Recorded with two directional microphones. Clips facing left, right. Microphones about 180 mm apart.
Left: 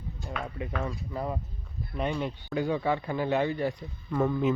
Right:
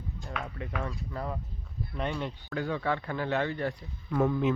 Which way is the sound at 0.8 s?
10° left (ahead or behind).